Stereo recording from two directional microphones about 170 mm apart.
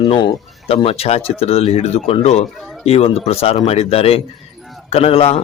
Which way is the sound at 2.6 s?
Centre (ahead or behind).